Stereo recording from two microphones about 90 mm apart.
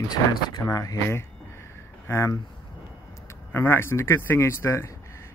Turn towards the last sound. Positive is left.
turn(degrees=30)  # may be behind; listen again after turning